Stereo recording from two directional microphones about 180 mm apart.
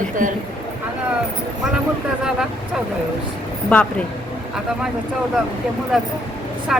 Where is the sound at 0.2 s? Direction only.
45° right (ahead or behind).